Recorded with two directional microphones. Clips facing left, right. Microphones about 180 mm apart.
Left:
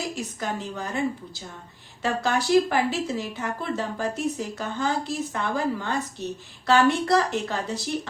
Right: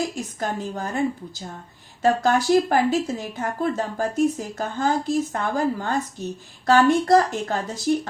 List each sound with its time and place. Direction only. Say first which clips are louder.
0.3 s speech: right 3 dB; 45° right (ahead or behind)